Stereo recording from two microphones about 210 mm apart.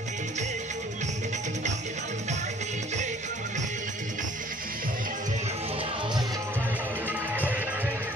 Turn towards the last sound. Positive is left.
turn(degrees=-10)  # may be behind; listen again after turning